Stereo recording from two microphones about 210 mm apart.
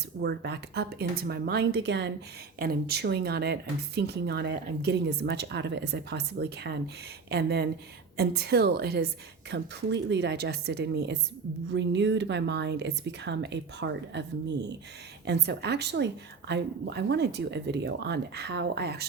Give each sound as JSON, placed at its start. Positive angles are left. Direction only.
{"t": 0.2, "sound": "speech", "side_deg": -50}